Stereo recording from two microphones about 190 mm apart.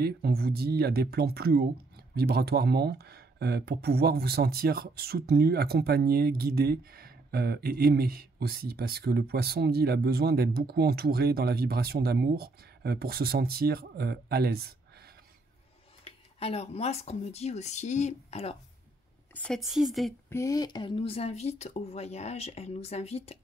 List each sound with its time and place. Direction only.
0.0 s speech: 55° right (ahead or behind)
16.0 s speech: 30° left (ahead or behind)
19.3 s a woman's voice: 5° left (ahead or behind)
20.2 s speech: 15° left (ahead or behind); by 23.4 s 35° left (ahead or behind)